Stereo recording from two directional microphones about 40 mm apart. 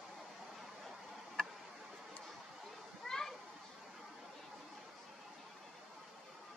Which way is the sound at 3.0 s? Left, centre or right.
Centre.